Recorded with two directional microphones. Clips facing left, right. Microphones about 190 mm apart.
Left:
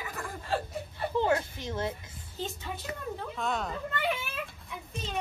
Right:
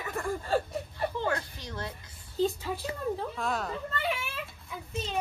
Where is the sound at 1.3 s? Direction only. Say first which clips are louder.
Left 4 dB; 20° left (ahead or behind).